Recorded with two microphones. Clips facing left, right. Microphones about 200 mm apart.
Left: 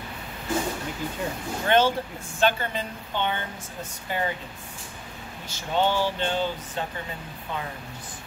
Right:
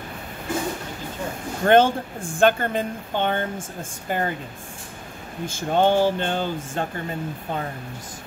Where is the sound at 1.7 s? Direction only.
50° right (ahead or behind).